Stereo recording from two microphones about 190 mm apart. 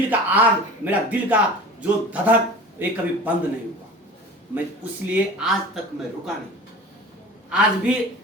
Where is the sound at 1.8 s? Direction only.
5° right (ahead or behind).